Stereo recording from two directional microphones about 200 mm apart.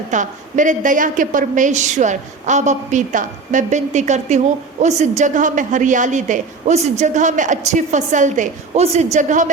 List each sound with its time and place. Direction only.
0.1 s a woman's voice: 40° right (ahead or behind)